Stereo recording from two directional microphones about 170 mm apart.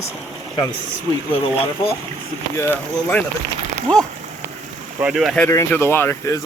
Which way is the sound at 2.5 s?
10° left (ahead or behind).